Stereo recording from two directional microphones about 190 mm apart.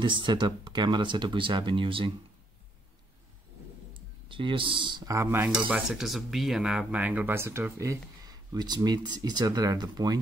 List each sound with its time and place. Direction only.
0.0 s speech: 25° right (ahead or behind)
3.9 s speech: 25° right (ahead or behind)